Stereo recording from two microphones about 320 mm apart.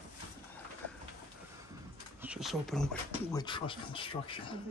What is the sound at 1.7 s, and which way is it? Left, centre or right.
Speech, centre.